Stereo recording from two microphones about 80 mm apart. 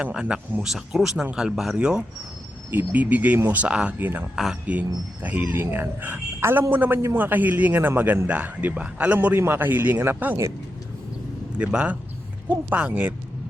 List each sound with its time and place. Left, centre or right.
0.0 s speech: centre
2.6 s speech: right
11.5 s speech: centre